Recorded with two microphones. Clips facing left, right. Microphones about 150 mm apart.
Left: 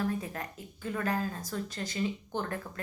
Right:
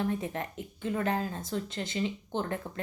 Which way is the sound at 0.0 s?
25° right (ahead or behind).